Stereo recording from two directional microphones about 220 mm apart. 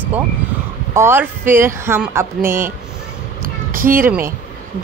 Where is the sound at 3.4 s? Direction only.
40° right (ahead or behind).